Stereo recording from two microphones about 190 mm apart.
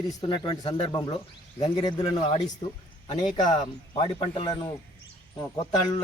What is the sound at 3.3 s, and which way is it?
Speech, 25° left (ahead or behind).